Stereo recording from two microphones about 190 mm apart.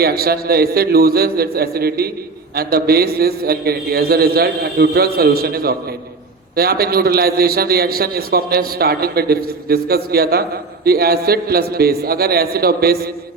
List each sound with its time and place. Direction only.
0.0 s a man's voice: 55° right (ahead or behind)